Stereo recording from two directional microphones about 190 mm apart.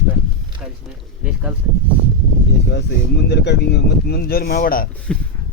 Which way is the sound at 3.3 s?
60° left (ahead or behind).